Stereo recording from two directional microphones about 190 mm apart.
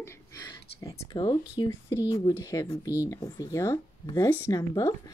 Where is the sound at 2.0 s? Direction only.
25° left (ahead or behind).